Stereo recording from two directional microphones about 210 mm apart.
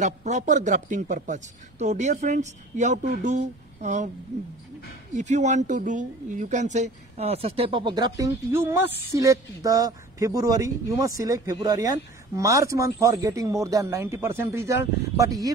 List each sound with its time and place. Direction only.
0.0 s a man's voice: 35° right (ahead or behind)
5.1 s speech: 35° right (ahead or behind); by 15.5 s 15° right (ahead or behind)